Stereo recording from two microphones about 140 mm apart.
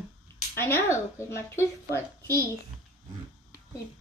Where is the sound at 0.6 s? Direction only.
15° left (ahead or behind).